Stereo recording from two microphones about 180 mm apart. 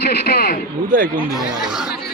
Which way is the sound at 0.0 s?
60° left (ahead or behind).